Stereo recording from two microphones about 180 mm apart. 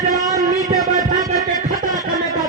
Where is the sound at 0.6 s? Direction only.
20° right (ahead or behind).